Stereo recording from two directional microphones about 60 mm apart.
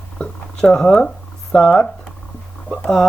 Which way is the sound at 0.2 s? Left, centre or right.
Centre.